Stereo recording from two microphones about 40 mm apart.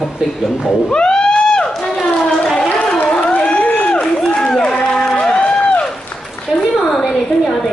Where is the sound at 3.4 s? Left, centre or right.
Left.